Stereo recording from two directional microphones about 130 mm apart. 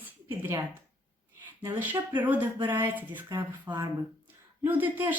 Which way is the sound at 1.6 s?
15° right (ahead or behind).